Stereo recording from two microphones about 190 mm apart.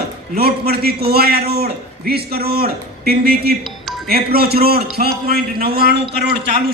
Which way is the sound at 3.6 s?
Centre (ahead or behind).